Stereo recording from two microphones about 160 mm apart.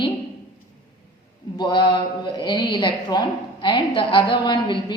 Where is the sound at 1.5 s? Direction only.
30° left (ahead or behind).